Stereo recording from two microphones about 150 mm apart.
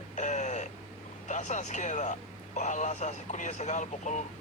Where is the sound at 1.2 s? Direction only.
50° left (ahead or behind).